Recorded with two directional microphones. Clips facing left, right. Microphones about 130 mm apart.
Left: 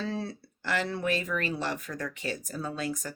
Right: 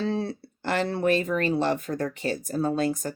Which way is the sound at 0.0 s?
25° right (ahead or behind).